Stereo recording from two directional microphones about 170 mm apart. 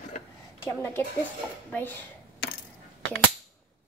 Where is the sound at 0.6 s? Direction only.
15° left (ahead or behind).